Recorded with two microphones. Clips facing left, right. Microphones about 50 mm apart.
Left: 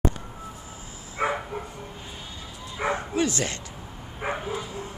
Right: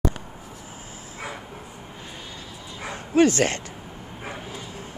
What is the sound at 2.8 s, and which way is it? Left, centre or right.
Bow-wow, left.